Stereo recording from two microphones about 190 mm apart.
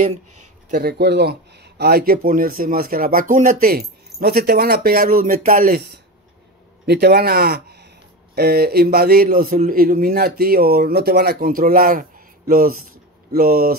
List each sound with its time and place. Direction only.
0.7 s speech: 50° right (ahead or behind)
8.4 s a sound: 55° right (ahead or behind)
9.6 s speech: 45° right (ahead or behind)